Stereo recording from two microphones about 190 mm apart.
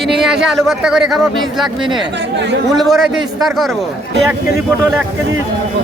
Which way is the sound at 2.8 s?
Centre (ahead or behind).